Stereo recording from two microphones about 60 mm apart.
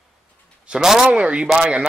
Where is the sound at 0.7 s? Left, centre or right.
Centre.